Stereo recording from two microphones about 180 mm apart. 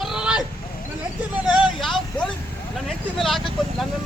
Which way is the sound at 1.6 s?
Centre (ahead or behind).